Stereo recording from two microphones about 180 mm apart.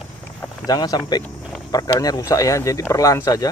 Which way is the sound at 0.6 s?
20° left (ahead or behind).